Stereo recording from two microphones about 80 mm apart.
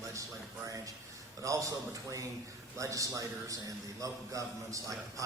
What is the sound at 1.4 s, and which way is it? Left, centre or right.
A man's voice, right.